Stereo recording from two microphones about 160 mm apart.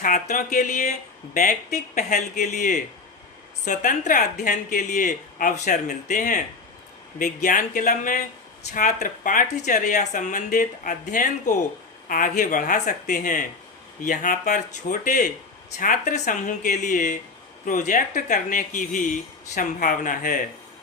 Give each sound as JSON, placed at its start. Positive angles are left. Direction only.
{"t": 0.0, "sound": "speech", "side_deg": 55}